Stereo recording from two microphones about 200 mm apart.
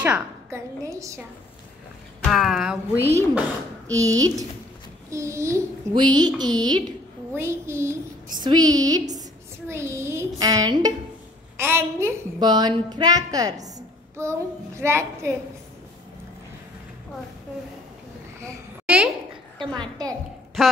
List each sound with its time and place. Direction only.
0.0 s a woman's voice: 10° right (ahead or behind)
2.2 s a woman's voice: centre (ahead or behind); by 4.5 s 15° right (ahead or behind)
5.1 s child singing: 15° right (ahead or behind)
7.3 s a woman's voice: 15° right (ahead or behind)
18.4 s a sound: 5° right (ahead or behind)
19.6 s child singing: 20° right (ahead or behind)
20.6 s speech: centre (ahead or behind)